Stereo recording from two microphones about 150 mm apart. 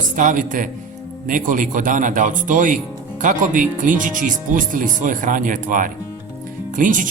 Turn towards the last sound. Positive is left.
turn(degrees=-60)  # may be behind; listen again after turning